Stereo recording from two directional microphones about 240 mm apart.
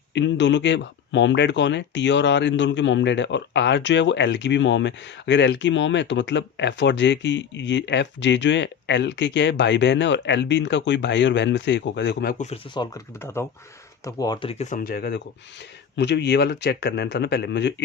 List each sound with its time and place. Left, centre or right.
0.1 s speech: left
12.5 s speech: centre; by 17.8 s left